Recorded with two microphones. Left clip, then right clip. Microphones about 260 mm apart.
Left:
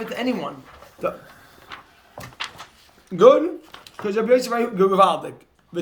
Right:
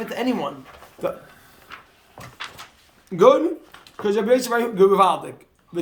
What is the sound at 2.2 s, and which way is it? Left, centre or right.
Cupboard open or close, left.